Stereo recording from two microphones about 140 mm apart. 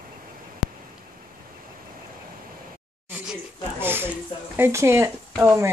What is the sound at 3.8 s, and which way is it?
Speech, 15° right (ahead or behind).